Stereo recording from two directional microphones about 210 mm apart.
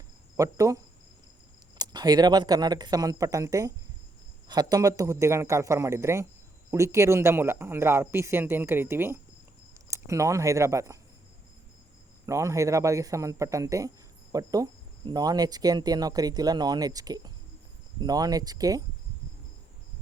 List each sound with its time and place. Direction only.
0.3 s cricket: 15° right (ahead or behind)
1.8 s cricket: 20° right (ahead or behind)
12.2 s cricket: 15° right (ahead or behind)